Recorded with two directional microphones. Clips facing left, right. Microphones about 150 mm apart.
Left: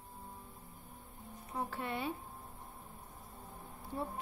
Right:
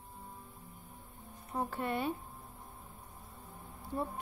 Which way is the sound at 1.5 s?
45° right (ahead or behind).